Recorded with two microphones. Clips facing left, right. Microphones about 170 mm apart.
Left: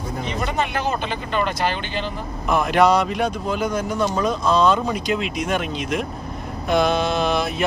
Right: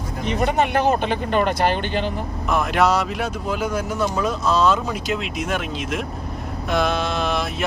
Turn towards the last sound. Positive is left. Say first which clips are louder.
# left 2 dB
turn(degrees=0)  # may be behind; listen again after turning